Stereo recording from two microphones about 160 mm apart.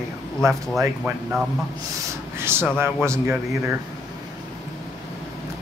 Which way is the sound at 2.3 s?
15° right (ahead or behind).